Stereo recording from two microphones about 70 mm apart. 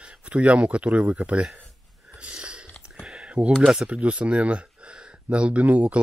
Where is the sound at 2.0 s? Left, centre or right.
Centre.